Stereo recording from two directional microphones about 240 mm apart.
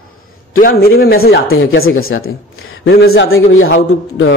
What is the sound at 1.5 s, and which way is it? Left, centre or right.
Speech, left.